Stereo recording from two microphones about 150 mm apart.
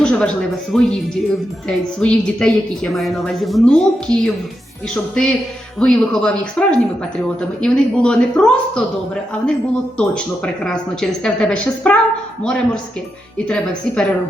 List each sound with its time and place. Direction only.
0.0 s a woman's voice: 5° left (ahead or behind)
10.0 s a woman's voice: 5° left (ahead or behind)